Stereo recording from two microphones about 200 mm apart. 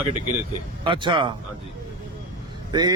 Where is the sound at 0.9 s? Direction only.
25° right (ahead or behind).